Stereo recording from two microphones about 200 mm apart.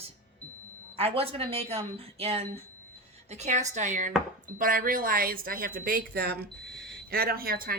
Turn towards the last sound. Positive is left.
turn(degrees=-45)  # may be behind; listen again after turning